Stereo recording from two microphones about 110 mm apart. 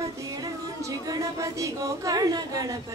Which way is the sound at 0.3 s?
35° right (ahead or behind).